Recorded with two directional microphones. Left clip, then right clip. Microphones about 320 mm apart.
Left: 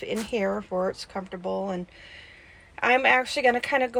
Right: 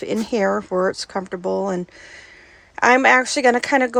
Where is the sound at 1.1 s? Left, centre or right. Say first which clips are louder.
Right 8 dB; right.